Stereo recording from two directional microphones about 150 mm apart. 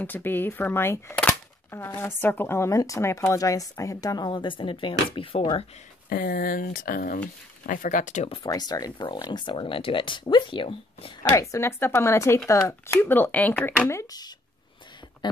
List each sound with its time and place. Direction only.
0.0 s speech: 15° left (ahead or behind); by 5.7 s 40° left (ahead or behind)
6.0 s speech: 80° left; by 8.3 s 55° left (ahead or behind)
8.5 s speech: 25° left (ahead or behind)
11.3 s speech: 20° left (ahead or behind)
13.8 s speech: 20° left (ahead or behind)